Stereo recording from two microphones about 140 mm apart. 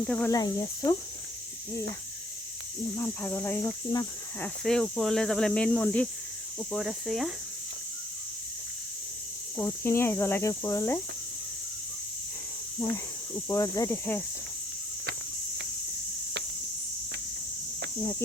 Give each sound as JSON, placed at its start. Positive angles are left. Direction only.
{"t": 0.0, "sound": "speech", "side_deg": 10}
{"t": 0.3, "sound": "speech", "side_deg": 25}
{"t": 2.9, "sound": "speech", "side_deg": 20}
{"t": 9.6, "sound": "speech", "side_deg": 20}
{"t": 13.3, "sound": "speech", "side_deg": 20}